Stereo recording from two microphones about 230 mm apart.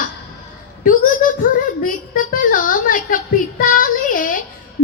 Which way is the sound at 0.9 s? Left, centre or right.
Left.